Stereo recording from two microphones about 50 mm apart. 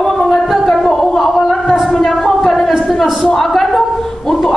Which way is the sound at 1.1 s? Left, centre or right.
Centre.